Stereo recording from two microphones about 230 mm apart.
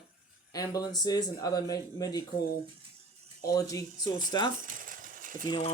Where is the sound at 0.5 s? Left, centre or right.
Centre.